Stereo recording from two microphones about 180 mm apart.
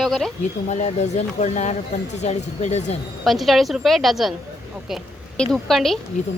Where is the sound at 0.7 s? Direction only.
40° left (ahead or behind).